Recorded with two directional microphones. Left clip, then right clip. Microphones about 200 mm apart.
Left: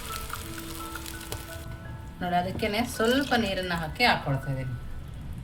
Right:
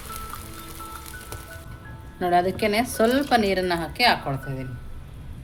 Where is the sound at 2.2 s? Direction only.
40° right (ahead or behind).